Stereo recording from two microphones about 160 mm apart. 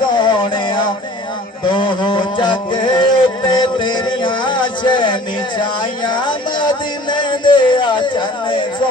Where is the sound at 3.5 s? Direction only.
30° left (ahead or behind).